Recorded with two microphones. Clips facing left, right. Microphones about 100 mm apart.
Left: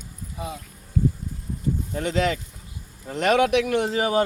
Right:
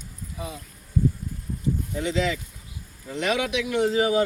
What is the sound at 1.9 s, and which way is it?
Speech, 50° left (ahead or behind).